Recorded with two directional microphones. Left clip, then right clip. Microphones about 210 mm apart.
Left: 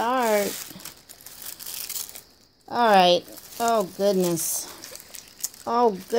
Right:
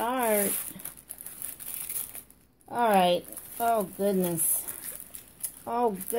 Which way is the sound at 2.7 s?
35° left (ahead or behind).